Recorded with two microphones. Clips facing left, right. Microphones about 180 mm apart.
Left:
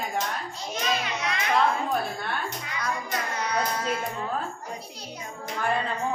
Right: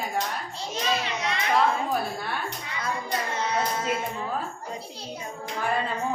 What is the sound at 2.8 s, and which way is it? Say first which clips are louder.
Speech: right 1 dB; 25° right (ahead or behind).